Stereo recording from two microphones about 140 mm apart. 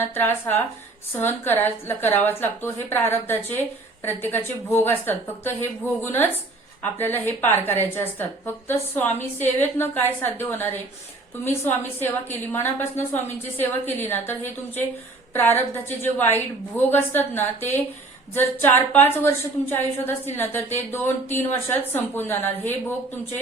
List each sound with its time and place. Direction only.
0.0 s a woman's voice: 15° left (ahead or behind)